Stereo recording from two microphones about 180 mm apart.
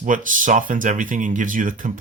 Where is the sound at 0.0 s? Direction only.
45° right (ahead or behind).